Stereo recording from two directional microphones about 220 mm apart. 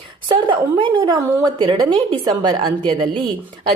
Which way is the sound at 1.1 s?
20° right (ahead or behind).